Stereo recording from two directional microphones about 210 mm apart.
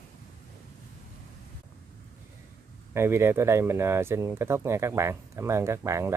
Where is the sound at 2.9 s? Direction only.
10° right (ahead or behind).